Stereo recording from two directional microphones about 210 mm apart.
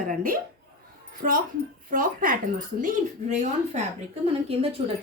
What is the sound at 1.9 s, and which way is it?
A woman's voice, 40° right (ahead or behind).